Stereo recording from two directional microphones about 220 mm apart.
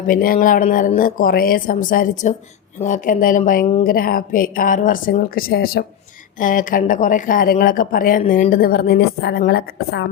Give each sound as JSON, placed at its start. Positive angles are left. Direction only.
{"t": 0.1, "sound": "a woman's voice", "side_deg": 40}